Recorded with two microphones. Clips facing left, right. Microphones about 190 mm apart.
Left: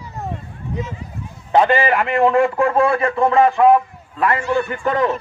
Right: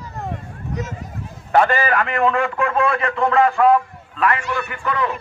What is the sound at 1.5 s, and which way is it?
A man's voice, 20° left (ahead or behind).